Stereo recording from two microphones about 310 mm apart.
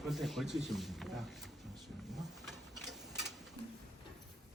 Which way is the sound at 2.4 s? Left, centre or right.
Centre.